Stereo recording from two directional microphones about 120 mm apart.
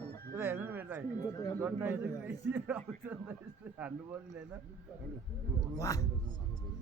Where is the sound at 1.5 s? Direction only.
15° right (ahead or behind).